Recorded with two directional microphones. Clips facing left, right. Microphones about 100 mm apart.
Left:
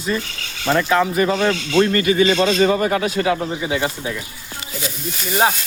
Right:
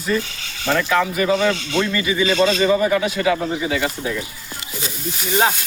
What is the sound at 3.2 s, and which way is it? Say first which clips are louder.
Speech: right 1 dB; 25° left (ahead or behind).